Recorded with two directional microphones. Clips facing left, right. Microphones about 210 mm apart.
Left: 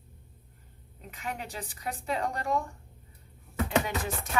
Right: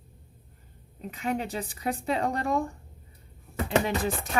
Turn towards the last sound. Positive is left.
turn(degrees=-30)  # may be behind; listen again after turning